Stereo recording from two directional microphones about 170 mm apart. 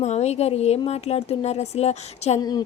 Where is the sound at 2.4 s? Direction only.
25° left (ahead or behind).